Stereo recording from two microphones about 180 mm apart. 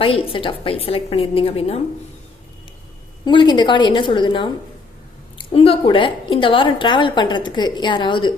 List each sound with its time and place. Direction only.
0.0 s a woman's voice: 30° left (ahead or behind)
3.2 s a woman's voice: 25° left (ahead or behind)